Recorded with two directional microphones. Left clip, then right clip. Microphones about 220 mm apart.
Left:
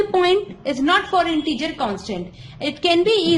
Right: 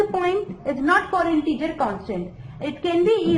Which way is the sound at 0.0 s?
55° left (ahead or behind).